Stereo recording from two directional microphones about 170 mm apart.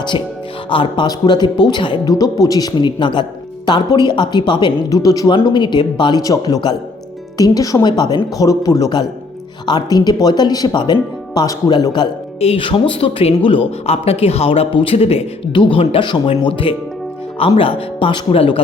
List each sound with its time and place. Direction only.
0.7 s speech: 30° left (ahead or behind)
11.9 s speech: 35° left (ahead or behind)